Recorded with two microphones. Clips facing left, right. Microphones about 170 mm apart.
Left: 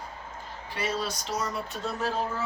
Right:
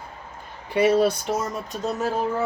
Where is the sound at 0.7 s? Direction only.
60° right (ahead or behind); by 2.1 s 45° right (ahead or behind).